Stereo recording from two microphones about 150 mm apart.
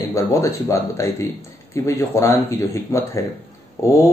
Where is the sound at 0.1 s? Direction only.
20° left (ahead or behind).